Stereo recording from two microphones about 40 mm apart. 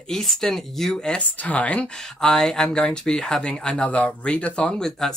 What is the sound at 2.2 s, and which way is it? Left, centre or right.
Speech, centre.